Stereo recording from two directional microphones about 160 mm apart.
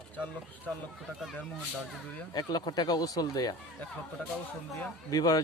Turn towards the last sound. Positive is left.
turn(degrees=25)  # may be behind; listen again after turning